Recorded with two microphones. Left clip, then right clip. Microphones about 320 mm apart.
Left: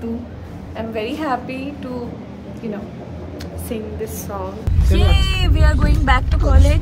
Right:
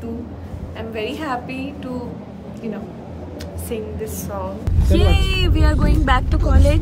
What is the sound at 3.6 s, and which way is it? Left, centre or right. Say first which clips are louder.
Speech: even; centre.